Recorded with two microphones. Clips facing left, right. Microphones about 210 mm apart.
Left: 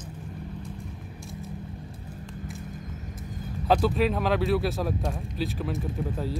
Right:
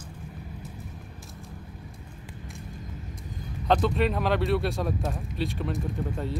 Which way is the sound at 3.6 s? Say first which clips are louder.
Left 1 dB; 5° left (ahead or behind).